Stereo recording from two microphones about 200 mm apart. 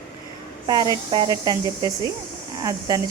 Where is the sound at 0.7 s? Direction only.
20° right (ahead or behind).